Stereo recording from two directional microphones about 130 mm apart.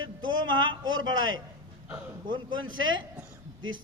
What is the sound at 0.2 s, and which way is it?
Speech, 35° right (ahead or behind).